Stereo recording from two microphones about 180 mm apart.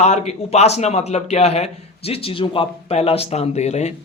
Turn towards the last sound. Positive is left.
turn(degrees=40)  # may be behind; listen again after turning